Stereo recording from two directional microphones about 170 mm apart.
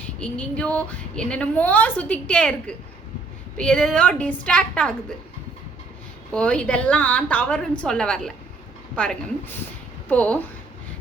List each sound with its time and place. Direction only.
0.2 s a woman's voice: 5° left (ahead or behind)
6.3 s a woman's voice: 5° left (ahead or behind)